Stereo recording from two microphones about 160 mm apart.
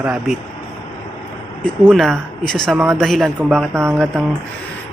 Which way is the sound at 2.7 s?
10° right (ahead or behind).